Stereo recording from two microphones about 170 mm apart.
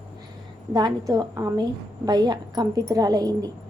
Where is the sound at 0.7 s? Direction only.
25° right (ahead or behind).